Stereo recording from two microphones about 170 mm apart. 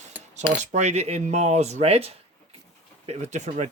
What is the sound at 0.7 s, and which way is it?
Speech, 40° right (ahead or behind).